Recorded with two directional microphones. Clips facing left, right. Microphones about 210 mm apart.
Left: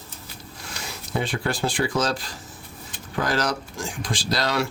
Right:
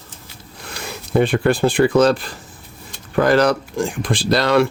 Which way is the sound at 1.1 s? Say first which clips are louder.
Right 10 dB; 60° right (ahead or behind).